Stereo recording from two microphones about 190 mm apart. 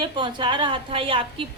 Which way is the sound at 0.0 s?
25° right (ahead or behind).